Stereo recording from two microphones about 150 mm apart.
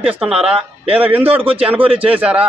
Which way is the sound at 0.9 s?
10° right (ahead or behind).